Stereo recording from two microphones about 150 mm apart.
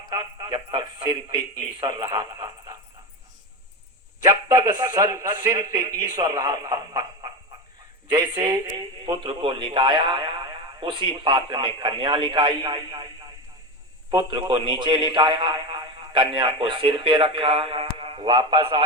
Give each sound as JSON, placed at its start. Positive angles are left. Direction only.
{"t": 0.1, "sound": "speech", "side_deg": -30}
{"t": 4.3, "sound": "a man's voice", "side_deg": -25}
{"t": 14.1, "sound": "speech", "side_deg": -30}